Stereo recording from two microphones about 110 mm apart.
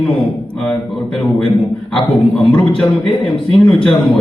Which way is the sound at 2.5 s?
5° left (ahead or behind).